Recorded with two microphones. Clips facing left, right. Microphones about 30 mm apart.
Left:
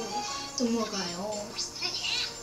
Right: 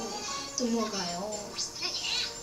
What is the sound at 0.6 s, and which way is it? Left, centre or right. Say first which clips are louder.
Music: left 1 dB; centre.